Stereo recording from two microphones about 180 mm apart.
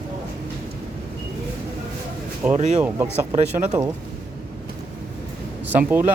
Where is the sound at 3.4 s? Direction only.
40° right (ahead or behind).